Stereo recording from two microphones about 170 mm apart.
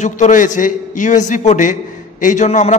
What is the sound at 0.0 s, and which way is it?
A man's voice, 45° left (ahead or behind).